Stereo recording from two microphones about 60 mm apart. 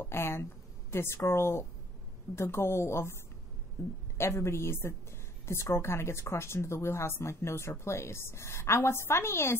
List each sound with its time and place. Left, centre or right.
0.0 s speech: left